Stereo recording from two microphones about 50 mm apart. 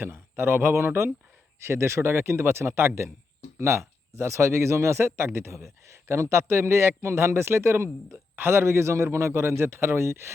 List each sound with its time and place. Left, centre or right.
0.0 s speech: right
8.1 s speech: right